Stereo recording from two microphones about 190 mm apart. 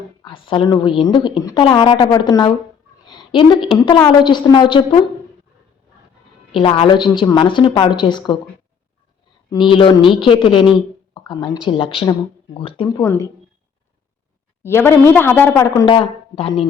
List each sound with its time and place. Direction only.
0.2 s a woman's voice: 25° left (ahead or behind)
6.5 s a woman's voice: 25° left (ahead or behind)
9.5 s a woman's voice: 25° left (ahead or behind)
11.1 s a sound: 20° left (ahead or behind)
11.6 s a woman's voice: 30° left (ahead or behind)
14.6 s speech: 15° left (ahead or behind); by 16.6 s 30° left (ahead or behind)